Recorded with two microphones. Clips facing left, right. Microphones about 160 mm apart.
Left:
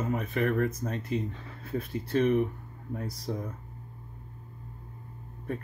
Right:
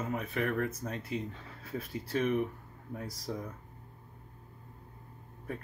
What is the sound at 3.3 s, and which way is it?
Speech, 30° left (ahead or behind).